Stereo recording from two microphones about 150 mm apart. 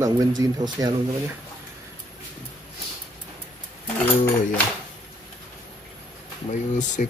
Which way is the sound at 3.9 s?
10° left (ahead or behind).